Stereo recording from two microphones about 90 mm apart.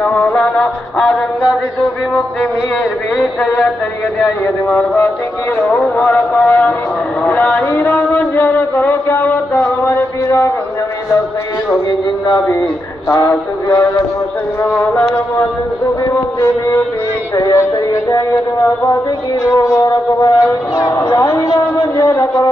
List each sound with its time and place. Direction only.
0.0 s music: 15° left (ahead or behind)
4.6 s a man's voice: 25° left (ahead or behind)
12.3 s speech: 40° left (ahead or behind)
16.3 s speech: 40° left (ahead or behind)
19.5 s speech: 35° left (ahead or behind)